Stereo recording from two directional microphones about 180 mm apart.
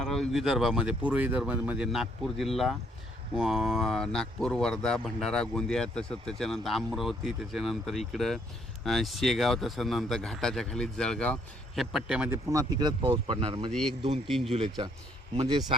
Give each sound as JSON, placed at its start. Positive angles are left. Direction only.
{"t": 0.0, "sound": "speech", "side_deg": 0}
{"t": 13.7, "sound": "speech", "side_deg": 5}
{"t": 14.5, "sound": "speech", "side_deg": -30}